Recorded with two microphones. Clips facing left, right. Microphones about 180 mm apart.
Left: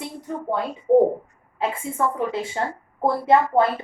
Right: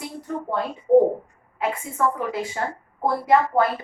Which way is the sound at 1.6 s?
30° left (ahead or behind).